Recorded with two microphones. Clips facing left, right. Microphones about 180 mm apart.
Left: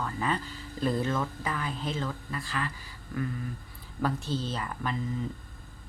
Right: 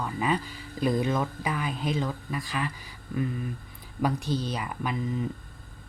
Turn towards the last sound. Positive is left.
turn(degrees=-15)  # may be behind; listen again after turning